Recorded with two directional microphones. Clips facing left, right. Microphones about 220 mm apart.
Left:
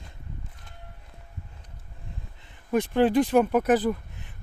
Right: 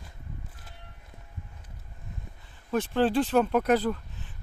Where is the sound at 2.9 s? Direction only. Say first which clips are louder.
Left 3 dB; 10° left (ahead or behind).